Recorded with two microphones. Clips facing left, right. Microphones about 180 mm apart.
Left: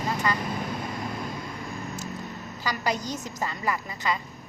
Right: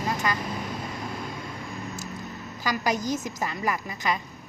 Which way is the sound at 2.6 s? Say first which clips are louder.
Right 2 dB; 15° right (ahead or behind).